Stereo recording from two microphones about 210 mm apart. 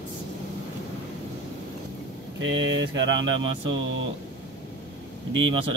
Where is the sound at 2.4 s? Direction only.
60° right (ahead or behind).